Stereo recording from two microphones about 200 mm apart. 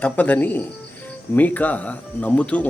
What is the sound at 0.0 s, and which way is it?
Speech, 10° left (ahead or behind).